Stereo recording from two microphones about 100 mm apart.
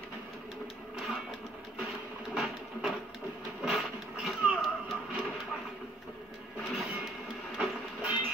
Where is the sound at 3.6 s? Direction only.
Centre (ahead or behind).